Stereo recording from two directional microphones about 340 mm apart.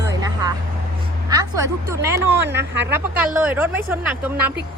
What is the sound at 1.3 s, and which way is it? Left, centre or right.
A woman's voice, centre.